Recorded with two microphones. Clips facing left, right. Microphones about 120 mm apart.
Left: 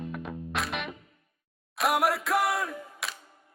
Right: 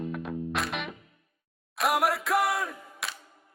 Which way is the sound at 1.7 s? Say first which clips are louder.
Even; centre (ahead or behind).